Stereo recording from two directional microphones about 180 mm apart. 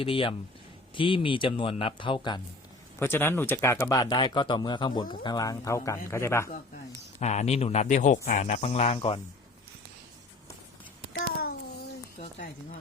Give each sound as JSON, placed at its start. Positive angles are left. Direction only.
{"t": 0.0, "sound": "speech", "side_deg": 30}
{"t": 3.0, "sound": "speech", "side_deg": 15}
{"t": 7.2, "sound": "speech", "side_deg": 40}
{"t": 11.1, "sound": "a sound", "side_deg": 60}